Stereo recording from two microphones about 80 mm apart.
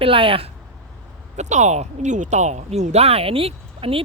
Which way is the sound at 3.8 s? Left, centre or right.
Right.